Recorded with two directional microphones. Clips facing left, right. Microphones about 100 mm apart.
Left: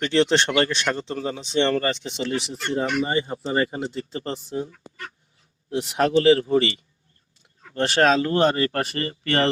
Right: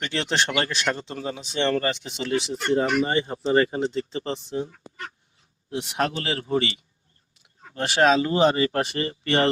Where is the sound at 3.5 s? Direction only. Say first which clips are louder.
Right 4 dB; centre (ahead or behind).